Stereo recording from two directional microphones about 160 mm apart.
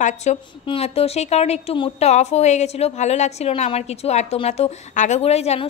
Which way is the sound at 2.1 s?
45° left (ahead or behind).